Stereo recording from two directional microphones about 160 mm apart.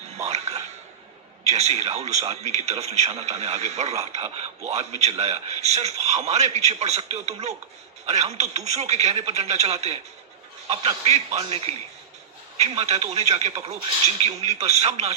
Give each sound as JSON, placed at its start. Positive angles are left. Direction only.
{"t": 0.2, "sound": "music", "side_deg": -40}
{"t": 1.5, "sound": "a man's voice", "side_deg": -40}